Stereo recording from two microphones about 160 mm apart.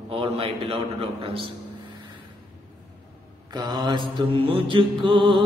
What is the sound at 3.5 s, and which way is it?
Mantra, 25° right (ahead or behind).